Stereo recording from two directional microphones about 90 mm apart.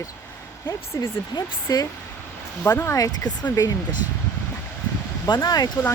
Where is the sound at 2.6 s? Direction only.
30° left (ahead or behind).